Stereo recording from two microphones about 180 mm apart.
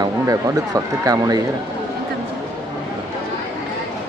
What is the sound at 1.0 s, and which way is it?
Speech, 20° right (ahead or behind).